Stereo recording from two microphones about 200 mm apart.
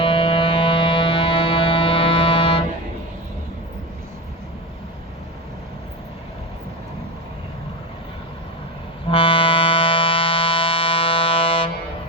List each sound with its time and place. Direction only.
0.0 s music: 25° left (ahead or behind)
9.0 s music: 25° left (ahead or behind)